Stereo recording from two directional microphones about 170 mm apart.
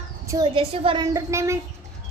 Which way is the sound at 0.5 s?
35° right (ahead or behind).